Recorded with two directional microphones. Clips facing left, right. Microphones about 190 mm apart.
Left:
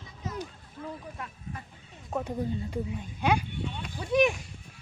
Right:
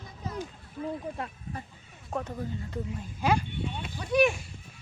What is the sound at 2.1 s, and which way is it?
Speech, 5° left (ahead or behind).